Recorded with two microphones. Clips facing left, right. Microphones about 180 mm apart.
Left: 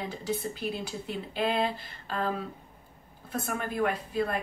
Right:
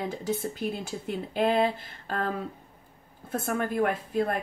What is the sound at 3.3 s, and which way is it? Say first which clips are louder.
Speech: right 4 dB; 45° right (ahead or behind).